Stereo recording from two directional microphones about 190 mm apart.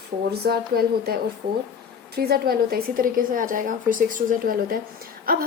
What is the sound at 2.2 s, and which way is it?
Speech, 55° right (ahead or behind).